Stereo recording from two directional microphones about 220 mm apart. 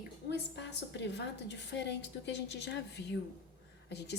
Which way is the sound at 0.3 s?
50° left (ahead or behind).